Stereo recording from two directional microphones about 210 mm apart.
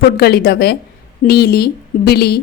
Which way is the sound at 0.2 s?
45° left (ahead or behind).